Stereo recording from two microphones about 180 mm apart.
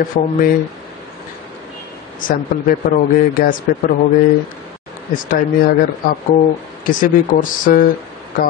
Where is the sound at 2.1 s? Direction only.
50° left (ahead or behind).